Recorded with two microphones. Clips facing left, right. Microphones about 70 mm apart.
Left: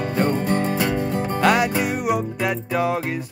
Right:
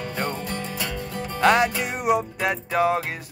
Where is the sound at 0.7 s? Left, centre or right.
Left.